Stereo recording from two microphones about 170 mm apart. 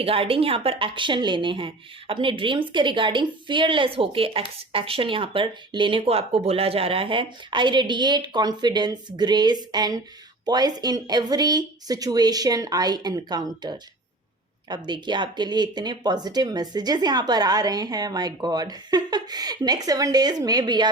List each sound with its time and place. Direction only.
0.0 s speech: 35° right (ahead or behind)